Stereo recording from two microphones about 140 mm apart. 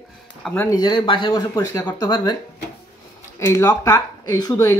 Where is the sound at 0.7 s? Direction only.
30° left (ahead or behind).